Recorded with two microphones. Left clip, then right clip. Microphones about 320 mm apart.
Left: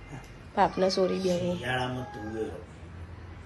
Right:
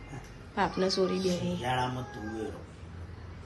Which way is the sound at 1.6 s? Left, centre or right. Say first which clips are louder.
Even; right.